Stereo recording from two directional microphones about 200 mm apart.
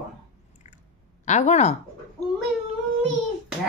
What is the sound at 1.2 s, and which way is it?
Speech, 35° left (ahead or behind).